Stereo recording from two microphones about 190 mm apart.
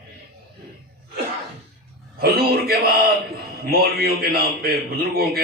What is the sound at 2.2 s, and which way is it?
A man's voice, 55° right (ahead or behind).